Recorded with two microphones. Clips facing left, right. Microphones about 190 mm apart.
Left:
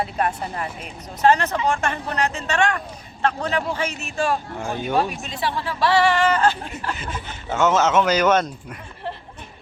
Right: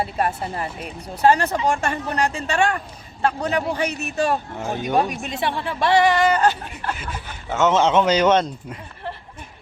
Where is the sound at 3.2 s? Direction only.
10° right (ahead or behind).